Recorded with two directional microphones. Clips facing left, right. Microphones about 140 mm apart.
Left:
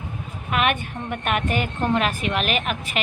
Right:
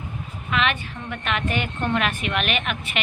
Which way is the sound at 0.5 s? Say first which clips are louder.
Left 2 dB; 50° left (ahead or behind).